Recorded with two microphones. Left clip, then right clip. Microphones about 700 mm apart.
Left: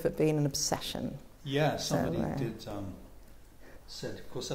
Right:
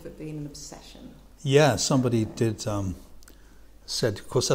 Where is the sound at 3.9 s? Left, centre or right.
Right.